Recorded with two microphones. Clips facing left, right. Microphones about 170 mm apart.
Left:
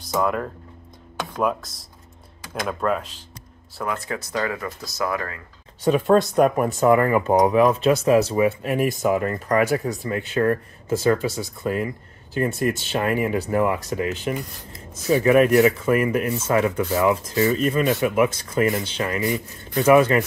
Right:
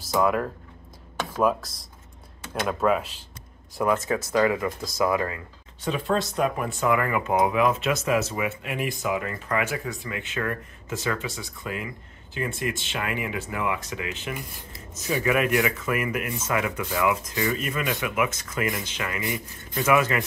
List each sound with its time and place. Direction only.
0.0 s speech: centre (ahead or behind)
3.7 s speech: 20° right (ahead or behind)
5.9 s speech: 50° left (ahead or behind)